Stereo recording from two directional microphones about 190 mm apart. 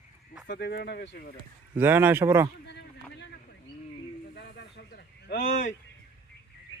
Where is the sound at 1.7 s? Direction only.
10° right (ahead or behind).